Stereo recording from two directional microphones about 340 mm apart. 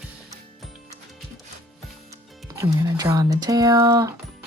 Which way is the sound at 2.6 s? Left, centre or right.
Centre.